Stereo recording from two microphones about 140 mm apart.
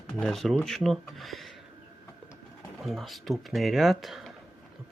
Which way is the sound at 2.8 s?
Centre (ahead or behind).